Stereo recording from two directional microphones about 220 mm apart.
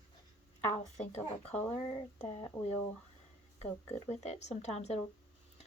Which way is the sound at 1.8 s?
20° left (ahead or behind).